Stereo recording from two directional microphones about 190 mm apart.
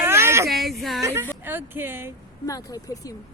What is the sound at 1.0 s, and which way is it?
A woman's voice, 15° right (ahead or behind).